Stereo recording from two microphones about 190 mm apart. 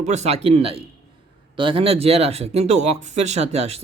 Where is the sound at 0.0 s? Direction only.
35° right (ahead or behind).